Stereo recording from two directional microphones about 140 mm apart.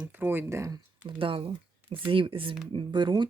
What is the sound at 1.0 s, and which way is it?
Speech, 40° right (ahead or behind).